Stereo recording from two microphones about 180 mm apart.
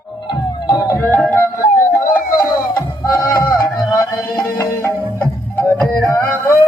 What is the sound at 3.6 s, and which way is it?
Music, 20° left (ahead or behind).